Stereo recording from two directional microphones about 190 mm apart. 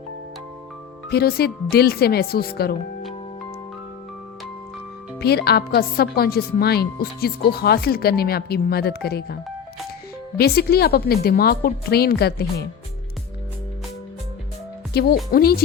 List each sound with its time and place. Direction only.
1.1 s speech: 55° left (ahead or behind)
5.2 s speech: 55° left (ahead or behind)
14.9 s speech: 50° left (ahead or behind)